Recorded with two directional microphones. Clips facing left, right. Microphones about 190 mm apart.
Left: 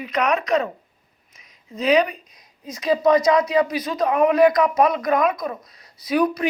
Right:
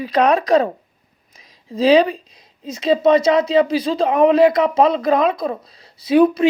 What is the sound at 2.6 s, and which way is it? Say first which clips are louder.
Speech: right 3 dB; 25° right (ahead or behind).